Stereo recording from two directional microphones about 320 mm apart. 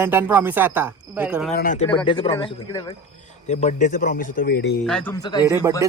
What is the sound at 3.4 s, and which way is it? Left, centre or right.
A man's voice, left.